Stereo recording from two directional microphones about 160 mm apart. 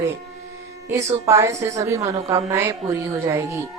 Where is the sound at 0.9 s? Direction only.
15° right (ahead or behind).